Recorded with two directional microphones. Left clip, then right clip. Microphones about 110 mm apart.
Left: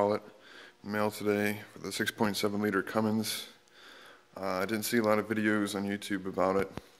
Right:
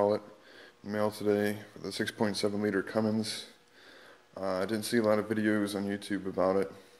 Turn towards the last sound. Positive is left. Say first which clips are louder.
# right 1 dB
turn(degrees=25)  # may be behind; listen again after turning